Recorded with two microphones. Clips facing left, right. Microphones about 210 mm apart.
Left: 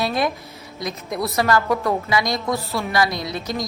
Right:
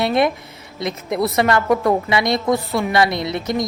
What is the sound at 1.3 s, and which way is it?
A woman's voice, 25° right (ahead or behind).